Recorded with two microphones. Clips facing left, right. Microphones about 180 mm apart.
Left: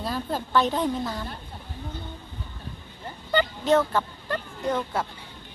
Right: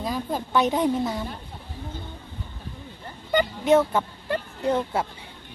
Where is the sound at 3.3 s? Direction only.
15° right (ahead or behind).